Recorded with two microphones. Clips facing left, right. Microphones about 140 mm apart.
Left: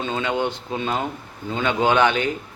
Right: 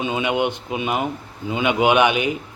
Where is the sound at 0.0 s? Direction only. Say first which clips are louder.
Right 2 dB; 15° right (ahead or behind).